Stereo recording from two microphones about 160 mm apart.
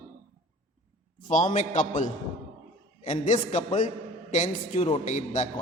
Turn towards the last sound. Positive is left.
turn(degrees=50)  # may be behind; listen again after turning